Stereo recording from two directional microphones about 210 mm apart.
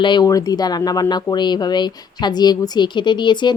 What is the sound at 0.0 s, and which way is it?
A woman's voice, 20° left (ahead or behind).